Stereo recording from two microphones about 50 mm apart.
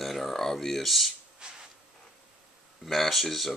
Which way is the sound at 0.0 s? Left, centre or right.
Centre.